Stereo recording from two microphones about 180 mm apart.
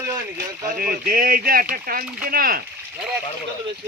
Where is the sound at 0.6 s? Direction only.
50° right (ahead or behind).